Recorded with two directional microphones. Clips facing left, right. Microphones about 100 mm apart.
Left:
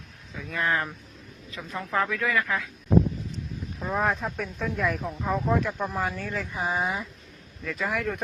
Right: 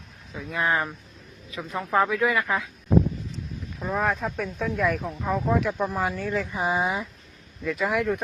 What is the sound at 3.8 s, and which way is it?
Speech, 5° left (ahead or behind).